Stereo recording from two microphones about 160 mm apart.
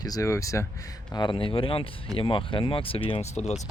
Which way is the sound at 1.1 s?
30° left (ahead or behind).